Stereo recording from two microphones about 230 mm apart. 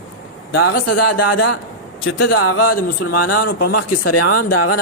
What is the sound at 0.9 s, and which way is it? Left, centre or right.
Speech, left.